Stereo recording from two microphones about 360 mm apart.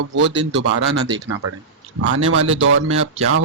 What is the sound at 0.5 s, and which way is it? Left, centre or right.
Speech, right.